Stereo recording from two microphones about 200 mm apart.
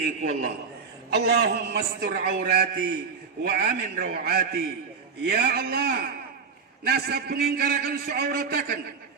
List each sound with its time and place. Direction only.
0.0 s a man's voice: 45° right (ahead or behind)